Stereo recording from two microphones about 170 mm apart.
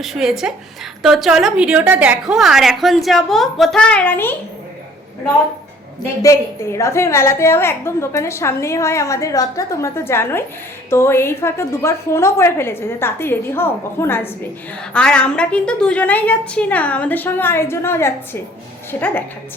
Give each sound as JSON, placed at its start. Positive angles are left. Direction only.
{"t": 0.0, "sound": "a woman's voice", "side_deg": 0}
{"t": 6.2, "sound": "a woman's voice", "side_deg": 15}